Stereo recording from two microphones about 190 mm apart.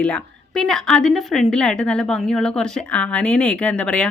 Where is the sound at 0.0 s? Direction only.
5° left (ahead or behind).